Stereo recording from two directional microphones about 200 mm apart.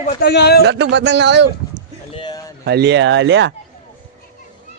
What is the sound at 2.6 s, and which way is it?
Speech, 55° right (ahead or behind).